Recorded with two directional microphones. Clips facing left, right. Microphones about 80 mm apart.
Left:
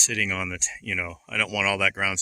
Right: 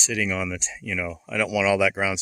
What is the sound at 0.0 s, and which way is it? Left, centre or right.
Speech, centre.